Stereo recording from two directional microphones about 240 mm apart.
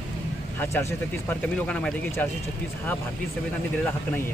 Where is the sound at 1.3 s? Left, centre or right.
Centre.